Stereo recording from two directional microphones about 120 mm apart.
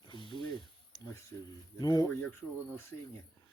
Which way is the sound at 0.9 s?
35° left (ahead or behind).